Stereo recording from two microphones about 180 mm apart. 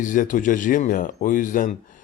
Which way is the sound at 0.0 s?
45° left (ahead or behind).